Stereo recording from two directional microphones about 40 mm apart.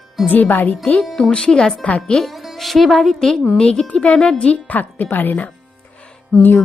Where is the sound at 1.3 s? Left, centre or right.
Left.